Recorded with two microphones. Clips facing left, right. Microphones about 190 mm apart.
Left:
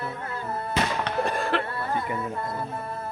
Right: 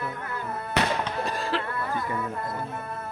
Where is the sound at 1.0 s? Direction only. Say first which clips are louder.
Left 3 dB; 55° left (ahead or behind).